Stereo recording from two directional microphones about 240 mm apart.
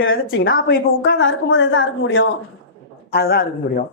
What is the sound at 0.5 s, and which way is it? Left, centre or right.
A woman's voice, left.